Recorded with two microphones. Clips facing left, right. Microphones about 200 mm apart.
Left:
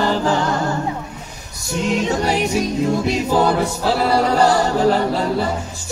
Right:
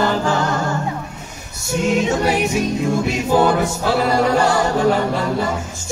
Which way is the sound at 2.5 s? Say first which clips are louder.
Even; 35° left (ahead or behind).